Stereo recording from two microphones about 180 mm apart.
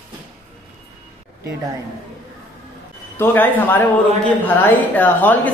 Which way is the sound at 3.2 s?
10° left (ahead or behind).